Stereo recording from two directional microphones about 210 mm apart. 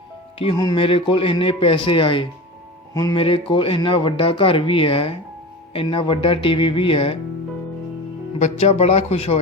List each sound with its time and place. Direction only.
0.3 s a man's voice: 20° left (ahead or behind)
8.4 s speech: 30° left (ahead or behind)